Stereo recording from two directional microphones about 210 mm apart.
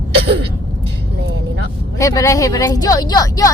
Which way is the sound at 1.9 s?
15° left (ahead or behind).